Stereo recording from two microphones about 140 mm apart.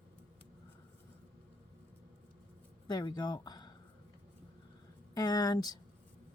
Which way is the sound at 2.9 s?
30° left (ahead or behind).